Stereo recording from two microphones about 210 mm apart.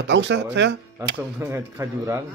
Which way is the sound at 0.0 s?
60° right (ahead or behind).